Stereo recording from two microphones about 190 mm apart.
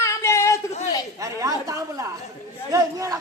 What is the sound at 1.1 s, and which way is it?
A woman's voice, 15° right (ahead or behind).